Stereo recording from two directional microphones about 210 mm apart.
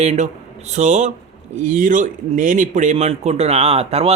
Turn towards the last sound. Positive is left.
turn(degrees=-30)  # may be behind; listen again after turning